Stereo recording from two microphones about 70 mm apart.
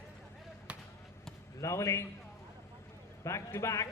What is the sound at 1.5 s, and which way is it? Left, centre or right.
Speech, left.